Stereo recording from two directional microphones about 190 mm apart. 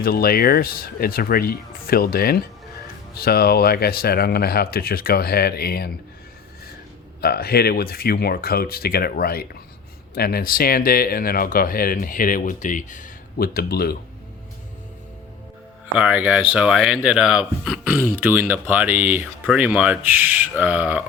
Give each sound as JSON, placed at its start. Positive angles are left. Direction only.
{"t": 0.0, "sound": "speech", "side_deg": 50}
{"t": 7.2, "sound": "speech", "side_deg": 55}
{"t": 16.0, "sound": "speech", "side_deg": -5}